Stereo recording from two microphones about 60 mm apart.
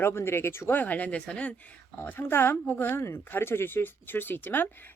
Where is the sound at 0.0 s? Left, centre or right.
Left; by 1.5 s centre.